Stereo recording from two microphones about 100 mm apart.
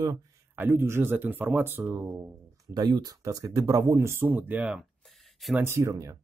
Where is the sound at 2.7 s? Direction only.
45° right (ahead or behind); by 4.6 s 15° right (ahead or behind).